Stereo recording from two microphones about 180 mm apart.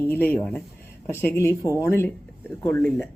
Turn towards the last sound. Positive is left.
turn(degrees=10)  # may be behind; listen again after turning